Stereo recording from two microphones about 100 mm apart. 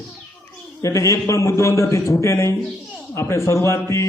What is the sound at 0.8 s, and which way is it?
A man's voice, 30° left (ahead or behind).